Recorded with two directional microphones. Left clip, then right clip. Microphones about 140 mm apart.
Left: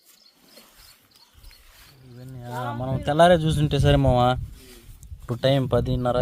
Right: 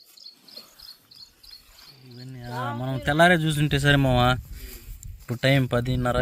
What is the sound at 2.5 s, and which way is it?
Speech, 15° left (ahead or behind).